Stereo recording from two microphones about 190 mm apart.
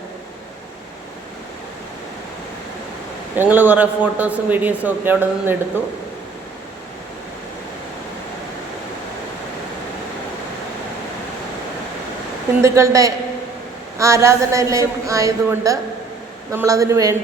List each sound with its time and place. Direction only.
3.3 s a man's voice: 10° right (ahead or behind)
12.6 s a man's voice: 15° right (ahead or behind)